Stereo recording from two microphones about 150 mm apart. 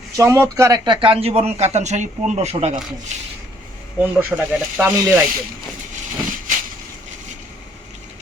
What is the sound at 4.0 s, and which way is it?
Speech, 10° right (ahead or behind).